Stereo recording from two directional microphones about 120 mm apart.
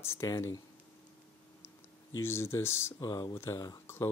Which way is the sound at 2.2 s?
20° left (ahead or behind).